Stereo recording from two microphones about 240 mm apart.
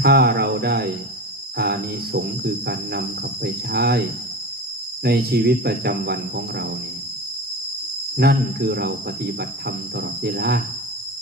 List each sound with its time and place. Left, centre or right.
0.0 s speech: right
5.0 s speech: right
8.2 s speech: right